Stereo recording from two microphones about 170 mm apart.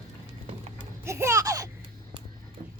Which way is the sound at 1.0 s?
15° right (ahead or behind).